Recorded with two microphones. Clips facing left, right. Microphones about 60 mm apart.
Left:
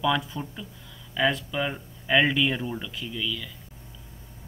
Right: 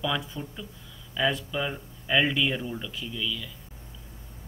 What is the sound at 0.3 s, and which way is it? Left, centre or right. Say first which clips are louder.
Speech: left 2 dB; left.